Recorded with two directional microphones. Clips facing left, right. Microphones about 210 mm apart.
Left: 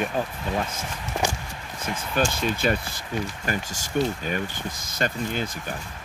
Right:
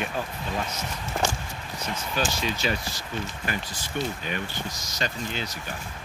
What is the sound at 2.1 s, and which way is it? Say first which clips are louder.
Speech: left 4 dB; 55° left (ahead or behind).